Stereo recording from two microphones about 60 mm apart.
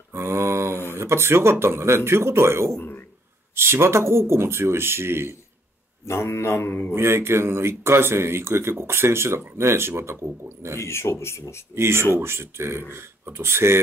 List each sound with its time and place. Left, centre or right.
0.1 s speech: right
6.0 s speech: left
7.0 s speech: right
10.8 s speech: left
11.7 s speech: right